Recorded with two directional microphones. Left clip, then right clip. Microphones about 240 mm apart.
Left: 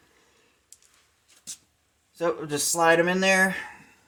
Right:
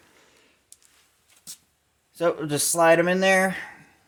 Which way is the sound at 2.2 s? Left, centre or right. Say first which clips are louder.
Right 3 dB; right.